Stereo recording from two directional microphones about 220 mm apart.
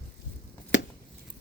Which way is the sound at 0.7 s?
55° left (ahead or behind).